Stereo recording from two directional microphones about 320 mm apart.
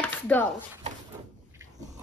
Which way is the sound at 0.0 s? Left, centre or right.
Centre.